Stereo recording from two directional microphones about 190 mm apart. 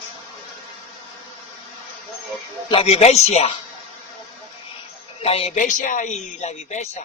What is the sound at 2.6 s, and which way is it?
Speech, 30° left (ahead or behind).